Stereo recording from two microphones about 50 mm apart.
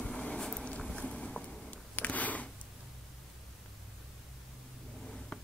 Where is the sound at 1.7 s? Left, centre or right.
Left.